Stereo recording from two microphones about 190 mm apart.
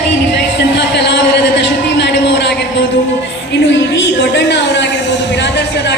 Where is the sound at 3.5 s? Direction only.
65° left (ahead or behind).